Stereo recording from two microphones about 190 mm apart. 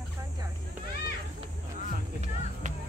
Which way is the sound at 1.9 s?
40° right (ahead or behind).